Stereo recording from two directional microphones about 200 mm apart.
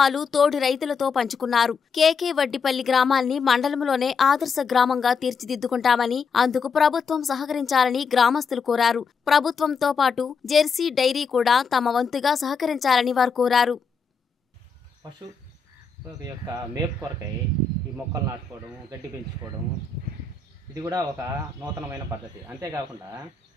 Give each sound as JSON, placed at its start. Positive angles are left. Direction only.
{"t": 0.0, "sound": "a woman's voice", "side_deg": 0}
{"t": 20.7, "sound": "a man's voice", "side_deg": -15}